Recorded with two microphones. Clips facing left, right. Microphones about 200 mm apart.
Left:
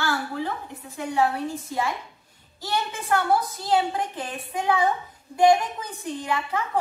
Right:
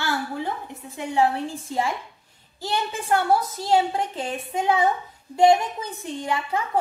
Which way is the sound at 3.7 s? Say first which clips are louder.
Right 2 dB; 25° right (ahead or behind).